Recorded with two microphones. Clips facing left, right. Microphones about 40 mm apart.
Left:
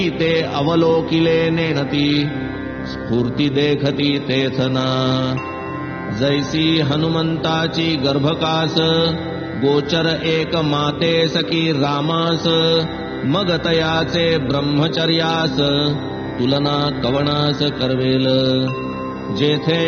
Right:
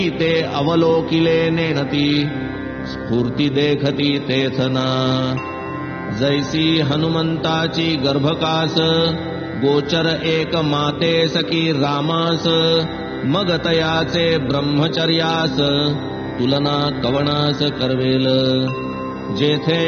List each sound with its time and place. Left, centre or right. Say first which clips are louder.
0.0 s mantra: even; centre
3.3 s mantra: even; centre